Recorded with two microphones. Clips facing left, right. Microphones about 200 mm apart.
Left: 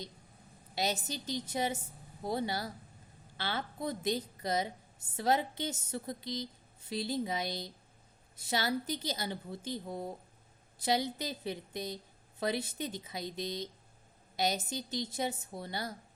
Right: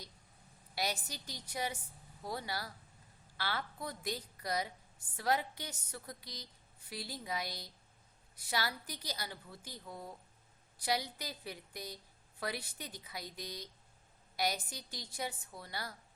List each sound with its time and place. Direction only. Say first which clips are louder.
0.8 s a woman's voice: left 5 dB; 25° left (ahead or behind)